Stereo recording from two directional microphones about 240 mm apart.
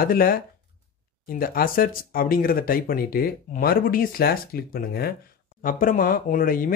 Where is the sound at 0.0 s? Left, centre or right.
Left.